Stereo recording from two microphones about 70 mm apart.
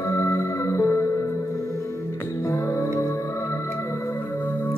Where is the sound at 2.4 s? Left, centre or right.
Left.